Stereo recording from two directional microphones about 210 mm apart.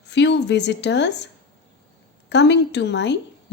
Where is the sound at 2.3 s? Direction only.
55° left (ahead or behind).